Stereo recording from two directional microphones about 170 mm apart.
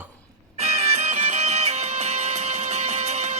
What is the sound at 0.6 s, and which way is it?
Music, 40° right (ahead or behind).